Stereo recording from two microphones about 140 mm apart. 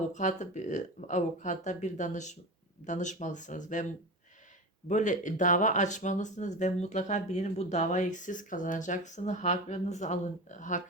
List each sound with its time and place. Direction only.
0.1 s speech: 60° left (ahead or behind)
4.9 s speech: 60° left (ahead or behind)